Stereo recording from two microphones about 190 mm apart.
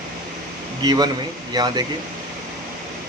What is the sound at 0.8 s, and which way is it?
Speech, 20° right (ahead or behind).